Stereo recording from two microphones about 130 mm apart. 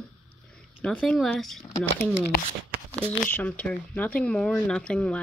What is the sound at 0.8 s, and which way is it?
Speech, 5° left (ahead or behind).